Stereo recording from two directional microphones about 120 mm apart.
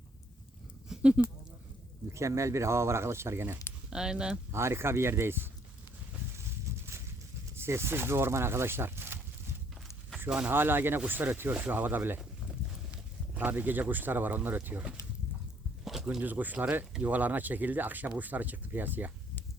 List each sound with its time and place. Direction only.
0.9 s a sound: 10° right (ahead or behind)
2.1 s speech: 25° right (ahead or behind)
3.8 s speech: 5° right (ahead or behind)
4.5 s speech: 20° right (ahead or behind)
6.7 s a sound: 25° right (ahead or behind)
7.5 s speech: 20° right (ahead or behind)
10.2 s speech: 10° right (ahead or behind)
15.8 s a sound: 5° right (ahead or behind)
16.0 s speech: 15° right (ahead or behind)